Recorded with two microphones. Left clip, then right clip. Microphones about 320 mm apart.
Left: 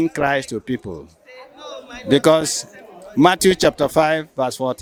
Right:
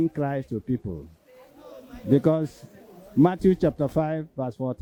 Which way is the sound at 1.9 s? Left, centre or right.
Centre.